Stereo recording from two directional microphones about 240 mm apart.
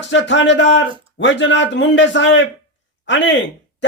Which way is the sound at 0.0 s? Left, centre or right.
Left.